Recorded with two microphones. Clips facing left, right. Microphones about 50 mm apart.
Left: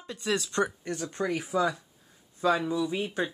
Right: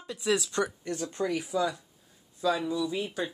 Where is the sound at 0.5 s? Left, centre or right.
Left.